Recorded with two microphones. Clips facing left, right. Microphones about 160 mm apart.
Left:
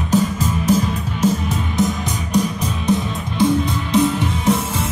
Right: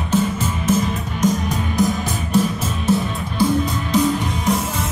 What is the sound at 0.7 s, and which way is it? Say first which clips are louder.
Music: left 1 dB; 30° left (ahead or behind).